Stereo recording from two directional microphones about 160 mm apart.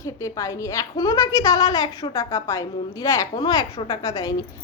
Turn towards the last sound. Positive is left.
turn(degrees=25)  # may be behind; listen again after turning